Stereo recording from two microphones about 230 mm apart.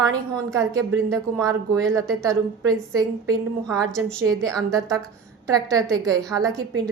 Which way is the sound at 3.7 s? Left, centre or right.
Centre.